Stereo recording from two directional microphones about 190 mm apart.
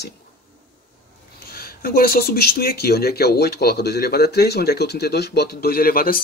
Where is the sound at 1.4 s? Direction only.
50° left (ahead or behind).